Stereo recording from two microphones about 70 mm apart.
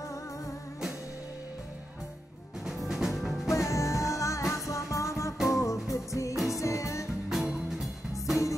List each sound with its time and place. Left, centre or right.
2.6 s music: centre
3.4 s music: left
7.2 s music: centre